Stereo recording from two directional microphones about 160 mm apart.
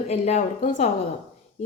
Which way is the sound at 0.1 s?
45° left (ahead or behind).